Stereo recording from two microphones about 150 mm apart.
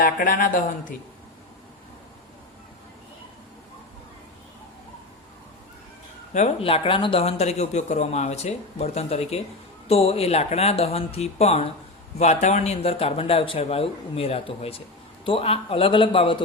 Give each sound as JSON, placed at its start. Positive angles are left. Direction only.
{"t": 0.0, "sound": "speech", "side_deg": 70}
{"t": 6.3, "sound": "speech", "side_deg": 45}